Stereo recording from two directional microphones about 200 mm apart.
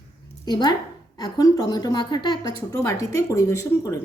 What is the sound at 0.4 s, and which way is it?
A woman's voice, 20° left (ahead or behind).